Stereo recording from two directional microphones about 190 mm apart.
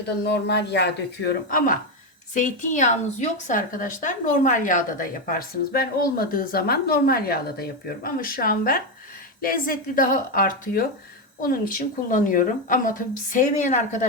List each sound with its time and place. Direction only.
0.2 s speech: 60° left (ahead or behind)
1.5 s a woman's voice: 50° left (ahead or behind)